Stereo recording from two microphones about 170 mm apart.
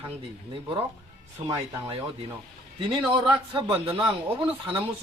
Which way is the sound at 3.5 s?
30° right (ahead or behind).